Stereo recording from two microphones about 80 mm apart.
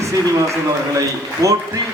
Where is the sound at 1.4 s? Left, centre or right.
Right.